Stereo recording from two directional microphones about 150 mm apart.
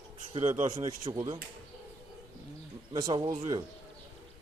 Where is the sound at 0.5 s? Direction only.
55° right (ahead or behind).